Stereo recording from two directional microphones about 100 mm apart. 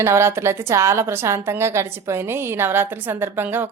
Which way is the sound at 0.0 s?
25° right (ahead or behind).